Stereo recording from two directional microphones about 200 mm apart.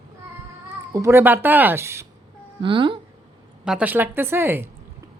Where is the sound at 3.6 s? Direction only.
5° right (ahead or behind).